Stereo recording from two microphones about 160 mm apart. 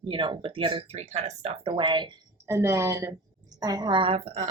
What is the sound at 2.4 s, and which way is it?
Speech, 15° right (ahead or behind).